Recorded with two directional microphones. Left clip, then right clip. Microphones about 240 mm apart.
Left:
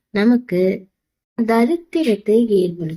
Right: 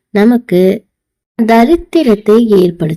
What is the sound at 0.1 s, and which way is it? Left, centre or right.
A woman's voice, right.